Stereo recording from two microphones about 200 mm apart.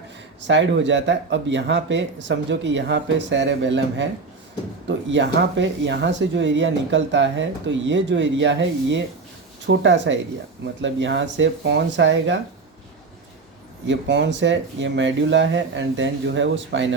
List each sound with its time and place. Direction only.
0.4 s speech: 65° right (ahead or behind)
5.1 s speech: 65° right (ahead or behind)
13.8 s speech: 60° right (ahead or behind)